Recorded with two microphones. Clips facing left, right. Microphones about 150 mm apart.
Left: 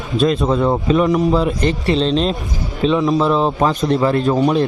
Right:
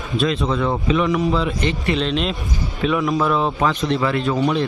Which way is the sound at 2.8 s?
25° left (ahead or behind).